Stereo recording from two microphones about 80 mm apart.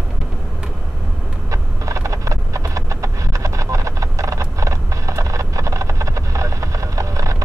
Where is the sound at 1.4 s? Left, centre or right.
Right.